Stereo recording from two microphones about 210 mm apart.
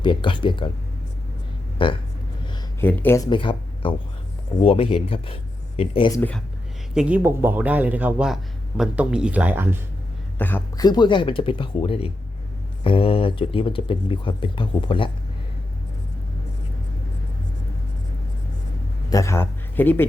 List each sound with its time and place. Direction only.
0.0 s speech: 25° left (ahead or behind)
1.8 s speech: 25° left (ahead or behind)
2.8 s speech: 10° left (ahead or behind)
3.2 s speech: 25° left (ahead or behind)
6.1 s speech: 10° left (ahead or behind)
6.9 s speech: 5° right (ahead or behind)
10.3 s speech: 10° left (ahead or behind)
19.1 s a man's voice: 15° left (ahead or behind)